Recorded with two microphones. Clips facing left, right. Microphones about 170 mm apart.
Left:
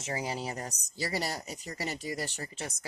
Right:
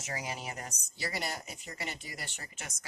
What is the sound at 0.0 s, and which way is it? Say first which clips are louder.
Speech: left 5 dB; 30° left (ahead or behind).